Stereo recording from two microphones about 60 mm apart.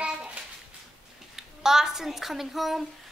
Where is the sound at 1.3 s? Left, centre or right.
Centre.